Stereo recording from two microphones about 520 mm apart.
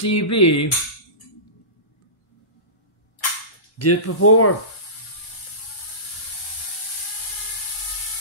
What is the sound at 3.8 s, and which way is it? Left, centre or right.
Speech, left.